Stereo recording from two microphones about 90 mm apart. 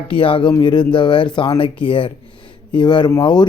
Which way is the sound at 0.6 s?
60° left (ahead or behind).